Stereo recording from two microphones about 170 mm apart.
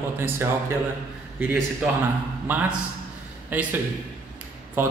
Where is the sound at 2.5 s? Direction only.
10° right (ahead or behind).